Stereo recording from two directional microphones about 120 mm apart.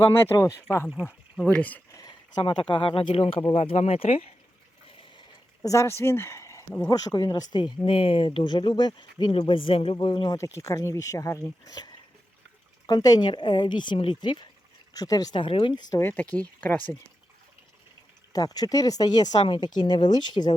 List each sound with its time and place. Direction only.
0.0 s speech: 20° left (ahead or behind)
0.9 s speech: 10° right (ahead or behind)
1.5 s speech: 15° left (ahead or behind)
1.9 s a sound: 35° left (ahead or behind)
2.5 s speech: 40° left (ahead or behind)
5.6 s speech: 25° left (ahead or behind)
7.9 s speech: 45° left (ahead or behind)
10.3 s speech: 25° left (ahead or behind)
15.4 s speech: 45° left (ahead or behind)
16.0 s speech: 15° left (ahead or behind)
18.3 s speech: 30° left (ahead or behind)